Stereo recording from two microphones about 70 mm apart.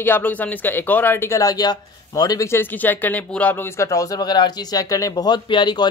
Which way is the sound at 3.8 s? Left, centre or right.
Left.